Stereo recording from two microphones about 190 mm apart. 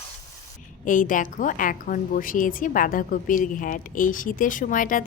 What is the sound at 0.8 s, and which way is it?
A woman's voice, 45° left (ahead or behind).